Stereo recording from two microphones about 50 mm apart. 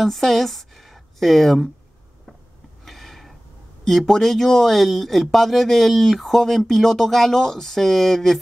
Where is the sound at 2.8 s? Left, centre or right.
Centre.